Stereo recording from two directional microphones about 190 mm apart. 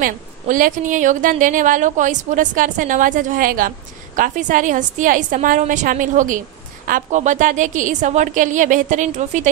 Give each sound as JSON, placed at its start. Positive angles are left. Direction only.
{"t": 0.0, "sound": "a woman's voice", "side_deg": -45}